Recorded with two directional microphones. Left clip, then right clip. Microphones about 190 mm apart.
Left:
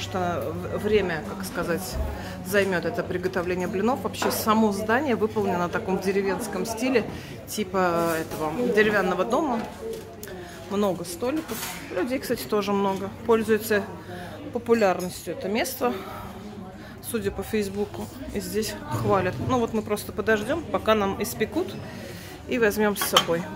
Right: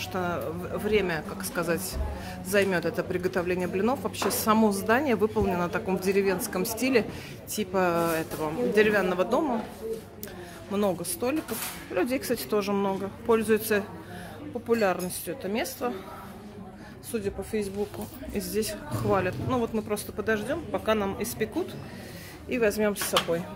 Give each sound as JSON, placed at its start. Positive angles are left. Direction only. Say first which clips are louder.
{"t": 0.0, "sound": "speech", "louder": "left 3 dB", "side_deg": -5}
{"t": 10.7, "sound": "speech", "louder": "left 2 dB", "side_deg": -10}
{"t": 17.1, "sound": "speech", "louder": "left 3 dB", "side_deg": 5}
{"t": 18.3, "sound": "speech", "louder": "left 1 dB", "side_deg": -10}